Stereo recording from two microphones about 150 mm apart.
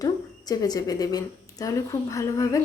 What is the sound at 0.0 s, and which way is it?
Speech, 25° left (ahead or behind).